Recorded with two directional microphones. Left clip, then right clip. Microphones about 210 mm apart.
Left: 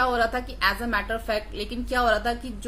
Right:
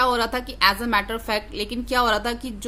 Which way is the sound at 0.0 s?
45° right (ahead or behind).